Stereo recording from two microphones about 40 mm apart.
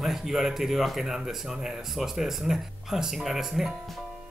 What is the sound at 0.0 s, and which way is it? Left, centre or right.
Speech, centre.